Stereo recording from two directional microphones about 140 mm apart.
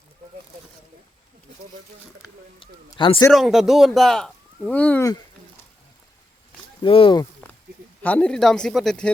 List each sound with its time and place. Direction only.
2.6 s speech: 40° left (ahead or behind)
3.3 s a man's voice: centre (ahead or behind)
6.8 s speech: 40° left (ahead or behind)
7.4 s a sound: 15° left (ahead or behind)
8.0 s a man's voice: 10° left (ahead or behind)